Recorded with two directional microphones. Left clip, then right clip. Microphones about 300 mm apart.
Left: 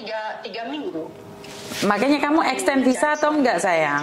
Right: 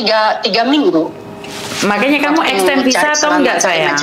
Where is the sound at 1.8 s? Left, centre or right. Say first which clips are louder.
Right 6 dB; left.